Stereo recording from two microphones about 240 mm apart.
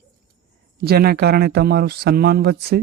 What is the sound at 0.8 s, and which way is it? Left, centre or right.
Speech, right.